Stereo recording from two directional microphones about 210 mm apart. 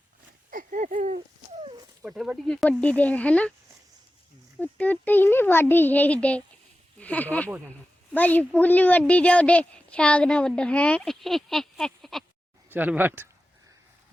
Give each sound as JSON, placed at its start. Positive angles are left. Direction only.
{"t": 0.5, "sound": "a sound", "side_deg": -40}
{"t": 2.0, "sound": "speech", "side_deg": -5}
{"t": 4.6, "sound": "a child's voice", "side_deg": 10}